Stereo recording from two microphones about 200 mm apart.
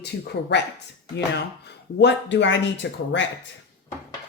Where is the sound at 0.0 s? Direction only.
55° left (ahead or behind).